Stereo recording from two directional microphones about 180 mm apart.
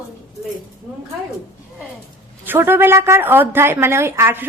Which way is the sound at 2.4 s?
10° right (ahead or behind).